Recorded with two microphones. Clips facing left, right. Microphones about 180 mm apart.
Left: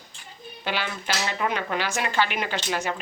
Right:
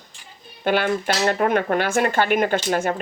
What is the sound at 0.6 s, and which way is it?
Speech, 50° right (ahead or behind).